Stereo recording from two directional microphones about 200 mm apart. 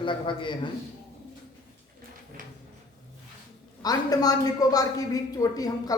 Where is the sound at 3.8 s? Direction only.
20° left (ahead or behind).